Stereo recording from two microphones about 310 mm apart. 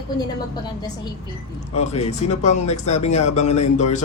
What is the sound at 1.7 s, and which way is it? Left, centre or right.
A woman's voice, left.